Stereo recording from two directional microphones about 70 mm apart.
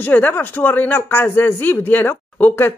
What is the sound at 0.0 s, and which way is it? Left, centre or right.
Speech, left.